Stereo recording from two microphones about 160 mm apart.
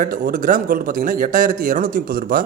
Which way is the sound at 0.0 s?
60° right (ahead or behind).